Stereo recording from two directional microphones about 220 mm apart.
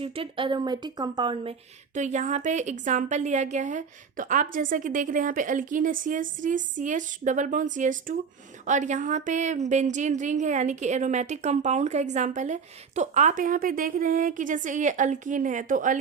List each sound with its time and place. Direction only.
0.0 s speech: 25° right (ahead or behind)
2.0 s a woman's voice: 35° right (ahead or behind)